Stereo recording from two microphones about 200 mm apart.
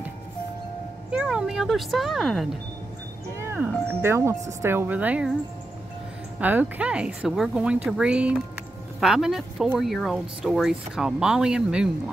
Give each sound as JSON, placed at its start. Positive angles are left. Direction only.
{"t": 1.1, "sound": "speech", "side_deg": -5}
{"t": 3.3, "sound": "music", "side_deg": -15}
{"t": 3.6, "sound": "speech", "side_deg": -10}
{"t": 6.4, "sound": "speech", "side_deg": -5}